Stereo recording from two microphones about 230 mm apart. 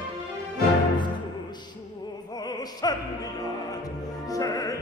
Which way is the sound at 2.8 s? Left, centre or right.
Centre.